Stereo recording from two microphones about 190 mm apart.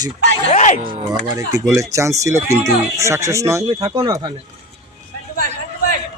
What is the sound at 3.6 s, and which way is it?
Speech, 30° right (ahead or behind).